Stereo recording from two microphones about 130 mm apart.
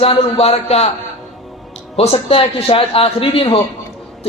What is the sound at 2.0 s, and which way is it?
Speech, 50° left (ahead or behind).